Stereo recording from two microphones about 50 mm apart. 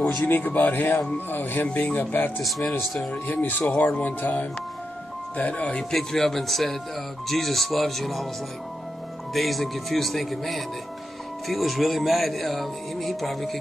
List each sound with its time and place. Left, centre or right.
0.2 s speech: left
2.8 s music: centre
3.1 s speech: left
5.9 s music: centre
9.3 s music: centre